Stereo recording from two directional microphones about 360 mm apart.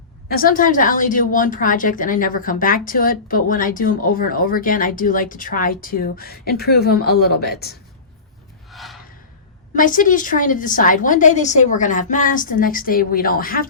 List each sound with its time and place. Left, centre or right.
0.3 s a woman's voice: left
8.7 s gasp: centre
9.7 s a woman's voice: left